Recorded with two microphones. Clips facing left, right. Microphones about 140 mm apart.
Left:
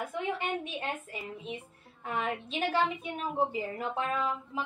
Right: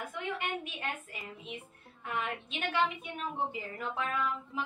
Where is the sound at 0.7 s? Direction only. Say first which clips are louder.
Left 4 dB; 30° left (ahead or behind).